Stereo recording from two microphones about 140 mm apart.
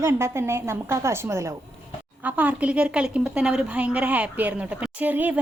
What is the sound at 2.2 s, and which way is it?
A woman's voice, 10° right (ahead or behind).